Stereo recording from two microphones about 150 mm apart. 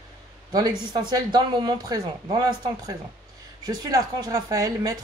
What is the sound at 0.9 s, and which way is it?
Speech, 30° right (ahead or behind).